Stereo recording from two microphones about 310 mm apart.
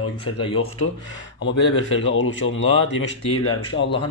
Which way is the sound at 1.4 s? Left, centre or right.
Left.